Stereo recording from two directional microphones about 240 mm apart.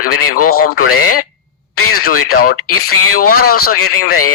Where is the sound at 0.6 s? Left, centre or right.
Left.